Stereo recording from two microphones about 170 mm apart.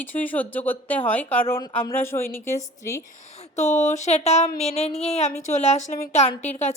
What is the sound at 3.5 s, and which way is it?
A woman's voice, 45° left (ahead or behind).